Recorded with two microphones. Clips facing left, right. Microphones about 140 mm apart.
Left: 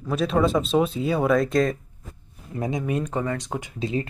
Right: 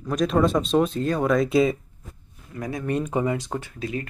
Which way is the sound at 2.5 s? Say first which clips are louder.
Left 3 dB; 25° left (ahead or behind).